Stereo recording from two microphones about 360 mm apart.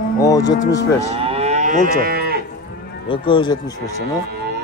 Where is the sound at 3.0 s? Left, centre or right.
Centre.